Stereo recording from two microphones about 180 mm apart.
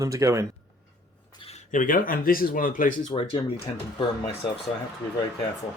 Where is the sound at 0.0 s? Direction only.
15° right (ahead or behind).